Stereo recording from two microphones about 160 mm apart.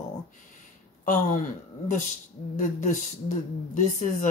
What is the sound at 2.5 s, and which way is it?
A woman's voice, 50° left (ahead or behind).